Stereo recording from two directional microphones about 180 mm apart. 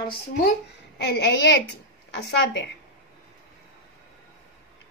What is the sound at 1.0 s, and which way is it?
Speech, 75° left (ahead or behind).